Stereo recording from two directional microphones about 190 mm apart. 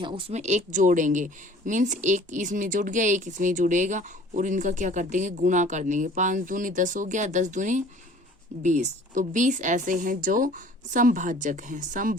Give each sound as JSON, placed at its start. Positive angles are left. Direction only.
{"t": 0.0, "sound": "speech", "side_deg": -25}